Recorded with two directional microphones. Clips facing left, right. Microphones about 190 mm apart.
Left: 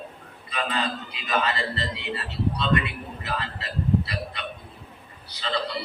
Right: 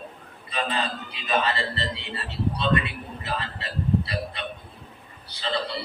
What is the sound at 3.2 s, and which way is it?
A man's voice, 30° right (ahead or behind).